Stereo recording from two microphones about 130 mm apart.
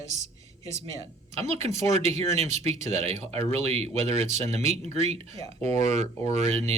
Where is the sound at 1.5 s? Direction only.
60° right (ahead or behind).